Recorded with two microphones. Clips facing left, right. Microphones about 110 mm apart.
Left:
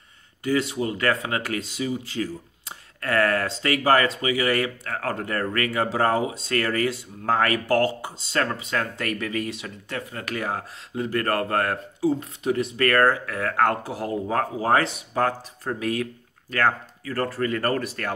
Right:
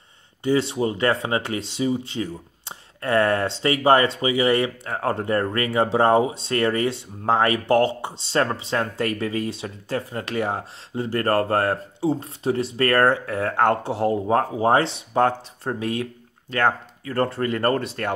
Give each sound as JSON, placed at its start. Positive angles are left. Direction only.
{"t": 0.4, "sound": "speech", "side_deg": -30}